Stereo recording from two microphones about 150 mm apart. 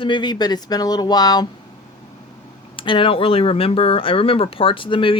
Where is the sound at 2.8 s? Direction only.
35° left (ahead or behind).